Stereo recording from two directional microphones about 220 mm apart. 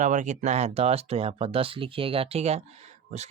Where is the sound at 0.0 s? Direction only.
35° right (ahead or behind).